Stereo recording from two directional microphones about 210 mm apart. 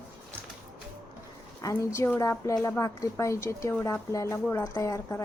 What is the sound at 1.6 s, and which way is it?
A woman's voice, 15° left (ahead or behind).